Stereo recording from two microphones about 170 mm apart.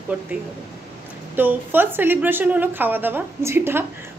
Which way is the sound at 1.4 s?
10° right (ahead or behind).